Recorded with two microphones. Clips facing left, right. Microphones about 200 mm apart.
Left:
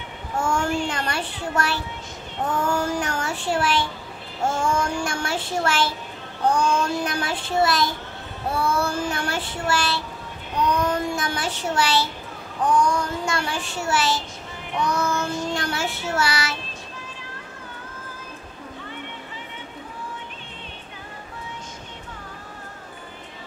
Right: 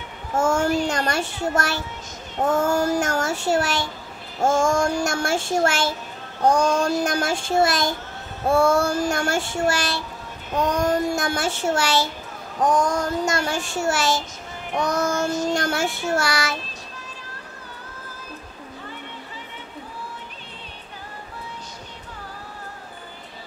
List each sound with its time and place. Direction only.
0.4 s a child's voice: 40° right (ahead or behind)
2.4 s child singing: 45° right (ahead or behind)